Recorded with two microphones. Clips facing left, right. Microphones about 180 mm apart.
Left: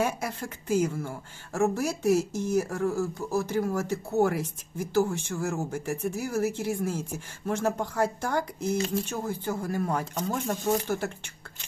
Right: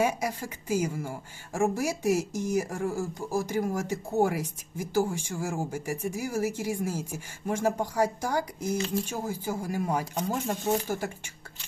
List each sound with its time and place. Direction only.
0.0 s speech: 10° right (ahead or behind)